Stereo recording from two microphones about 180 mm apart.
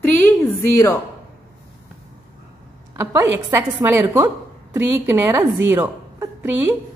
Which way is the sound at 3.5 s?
10° right (ahead or behind).